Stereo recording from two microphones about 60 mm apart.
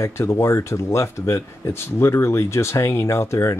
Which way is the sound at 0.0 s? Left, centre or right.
Left.